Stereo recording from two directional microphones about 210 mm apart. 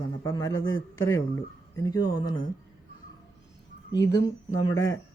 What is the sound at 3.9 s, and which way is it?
Speech, 15° left (ahead or behind).